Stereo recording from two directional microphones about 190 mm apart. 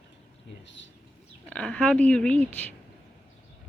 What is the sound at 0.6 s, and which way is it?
Bird, 75° left (ahead or behind).